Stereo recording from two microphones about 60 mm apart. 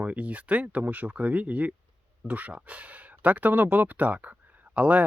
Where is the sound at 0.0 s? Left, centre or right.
Right.